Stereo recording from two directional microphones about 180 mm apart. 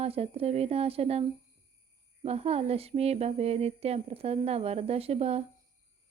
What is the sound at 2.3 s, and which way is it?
Speech, 35° right (ahead or behind).